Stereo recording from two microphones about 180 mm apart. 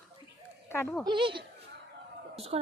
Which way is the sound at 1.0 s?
25° right (ahead or behind).